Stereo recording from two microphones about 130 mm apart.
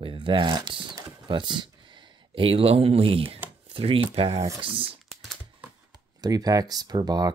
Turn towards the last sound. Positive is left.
turn(degrees=-30)  # may be behind; listen again after turning